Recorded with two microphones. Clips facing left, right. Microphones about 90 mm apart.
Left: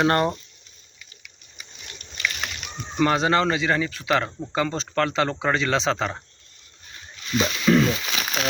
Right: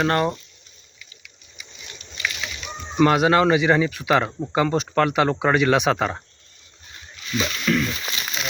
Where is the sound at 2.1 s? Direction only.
55° left (ahead or behind).